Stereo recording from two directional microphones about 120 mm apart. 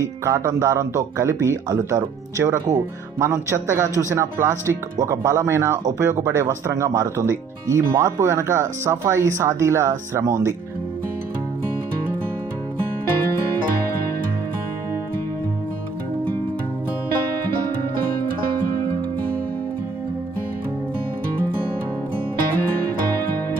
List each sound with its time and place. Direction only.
0.0 s speech: 25° right (ahead or behind)